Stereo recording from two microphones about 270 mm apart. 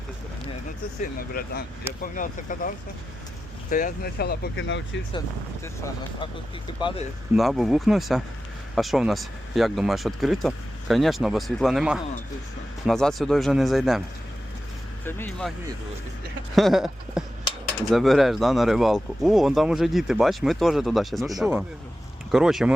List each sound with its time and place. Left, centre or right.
1.3 s speech: left
5.6 s speech: centre
7.3 s speech: centre
15.0 s speech: centre
16.6 s a sound: centre
17.9 s speech: centre